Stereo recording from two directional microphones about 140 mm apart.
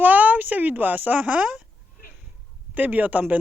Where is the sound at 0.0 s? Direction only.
10° right (ahead or behind).